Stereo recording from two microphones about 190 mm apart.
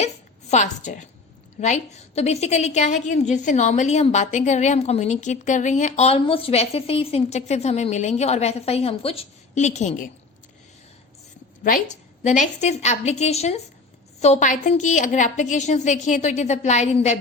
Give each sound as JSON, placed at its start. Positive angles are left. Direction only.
{"t": 0.5, "sound": "a woman's voice", "side_deg": 40}
{"t": 12.2, "sound": "a woman's voice", "side_deg": 40}